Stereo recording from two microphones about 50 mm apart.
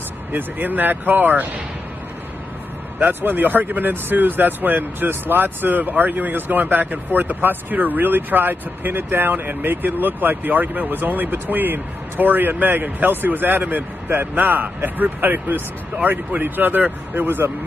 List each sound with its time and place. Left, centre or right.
0.3 s speech: right
3.0 s speech: right